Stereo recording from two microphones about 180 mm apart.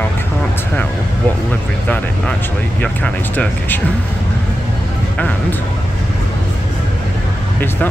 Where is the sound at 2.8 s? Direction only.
5° left (ahead or behind).